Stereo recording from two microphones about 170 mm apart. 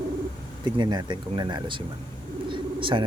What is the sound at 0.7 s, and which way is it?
Speech, 25° right (ahead or behind).